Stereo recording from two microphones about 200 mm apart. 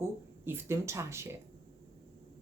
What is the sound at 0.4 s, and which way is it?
Speech, 10° right (ahead or behind).